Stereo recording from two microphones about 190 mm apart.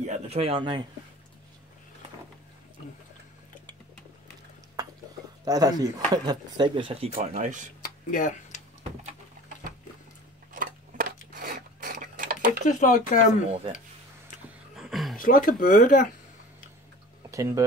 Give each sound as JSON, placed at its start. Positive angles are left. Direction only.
{"t": 0.0, "sound": "speech", "side_deg": -35}
{"t": 5.4, "sound": "speech", "side_deg": -20}
{"t": 7.8, "sound": "a sound", "side_deg": 45}
{"t": 10.5, "sound": "a sound", "side_deg": -45}
{"t": 11.3, "sound": "filing", "side_deg": -50}
{"t": 12.6, "sound": "speech", "side_deg": 40}
{"t": 14.8, "sound": "dog", "side_deg": 0}
{"t": 15.1, "sound": "speech", "side_deg": 50}
{"t": 17.3, "sound": "speech", "side_deg": -15}